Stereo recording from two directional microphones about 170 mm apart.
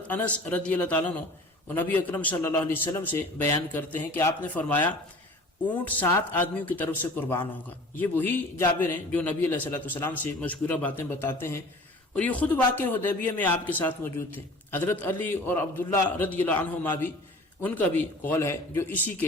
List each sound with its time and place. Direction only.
0.1 s a man's voice: 10° left (ahead or behind)